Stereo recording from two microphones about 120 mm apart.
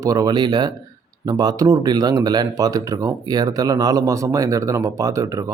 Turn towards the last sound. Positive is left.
turn(degrees=-30)  # may be behind; listen again after turning